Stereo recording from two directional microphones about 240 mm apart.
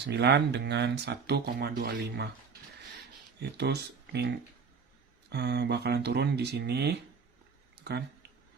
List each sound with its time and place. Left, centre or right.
0.0 s speech: right
3.6 s speech: right